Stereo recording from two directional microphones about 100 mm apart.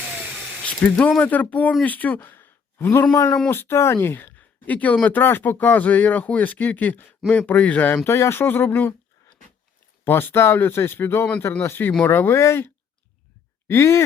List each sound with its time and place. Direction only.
0.6 s speech: 10° left (ahead or behind)
10.0 s speech: 20° left (ahead or behind)